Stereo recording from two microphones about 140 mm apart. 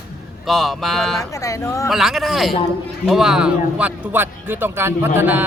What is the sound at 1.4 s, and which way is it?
Speech, 20° left (ahead or behind).